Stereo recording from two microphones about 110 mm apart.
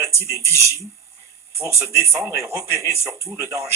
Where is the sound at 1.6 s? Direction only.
25° right (ahead or behind).